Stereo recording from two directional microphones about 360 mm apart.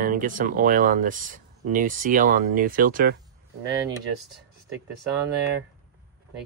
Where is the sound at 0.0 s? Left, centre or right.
Right.